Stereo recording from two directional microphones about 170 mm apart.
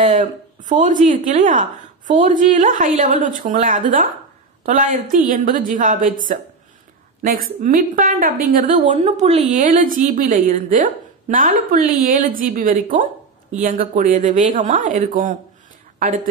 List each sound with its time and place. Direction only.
0.0 s a woman's voice: 45° right (ahead or behind)
7.2 s a woman's voice: 55° right (ahead or behind)
9.0 s a woman's voice: 40° right (ahead or behind)